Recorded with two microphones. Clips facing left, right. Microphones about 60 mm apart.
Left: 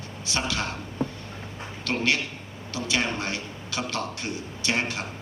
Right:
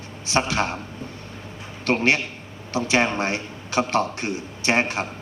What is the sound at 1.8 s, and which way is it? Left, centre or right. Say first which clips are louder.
A man's voice: right 5 dB; right.